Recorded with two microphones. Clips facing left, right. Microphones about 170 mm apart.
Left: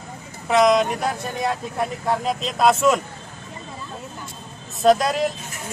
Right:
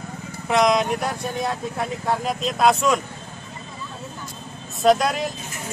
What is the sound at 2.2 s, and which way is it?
Speech, centre (ahead or behind).